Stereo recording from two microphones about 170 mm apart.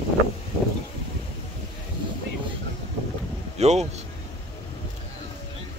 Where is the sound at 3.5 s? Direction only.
40° right (ahead or behind).